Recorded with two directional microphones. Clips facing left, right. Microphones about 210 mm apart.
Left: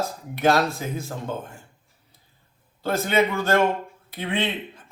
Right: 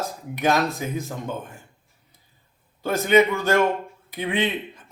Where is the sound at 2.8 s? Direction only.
15° right (ahead or behind).